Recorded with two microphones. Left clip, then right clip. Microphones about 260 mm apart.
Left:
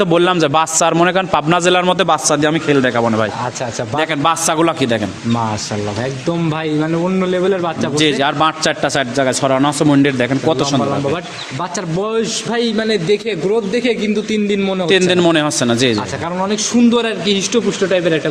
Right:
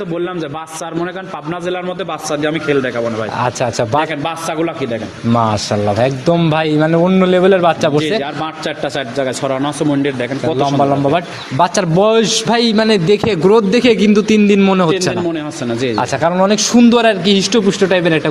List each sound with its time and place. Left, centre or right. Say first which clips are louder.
0.1 s a man's voice: left 8 dB; left
6.0 s a man's voice: right 6 dB; centre
7.9 s a man's voice: left 2 dB; left
9.1 s speech: left 2 dB; left
11.6 s a man's voice: right 9 dB; right
15.3 s speech: left 6 dB; left
16.0 s a man's voice: right 7 dB; right